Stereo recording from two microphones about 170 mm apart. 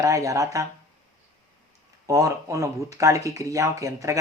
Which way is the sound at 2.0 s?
20° right (ahead or behind).